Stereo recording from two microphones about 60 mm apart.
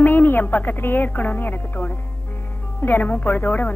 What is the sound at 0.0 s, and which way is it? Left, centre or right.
Speech, left.